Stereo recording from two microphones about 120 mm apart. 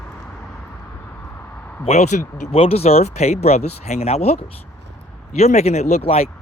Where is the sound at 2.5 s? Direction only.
55° left (ahead or behind).